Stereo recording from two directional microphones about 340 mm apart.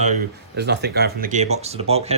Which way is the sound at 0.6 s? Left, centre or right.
Right.